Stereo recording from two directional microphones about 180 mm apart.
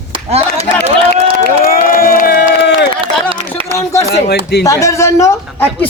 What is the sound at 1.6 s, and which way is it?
Crowd, 55° left (ahead or behind).